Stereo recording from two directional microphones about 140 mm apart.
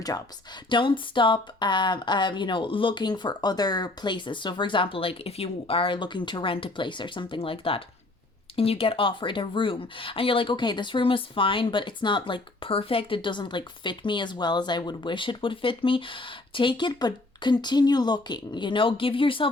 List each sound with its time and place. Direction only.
0.7 s speech: 35° left (ahead or behind)